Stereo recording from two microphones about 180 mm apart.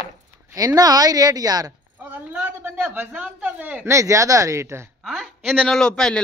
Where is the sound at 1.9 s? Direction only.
10° right (ahead or behind).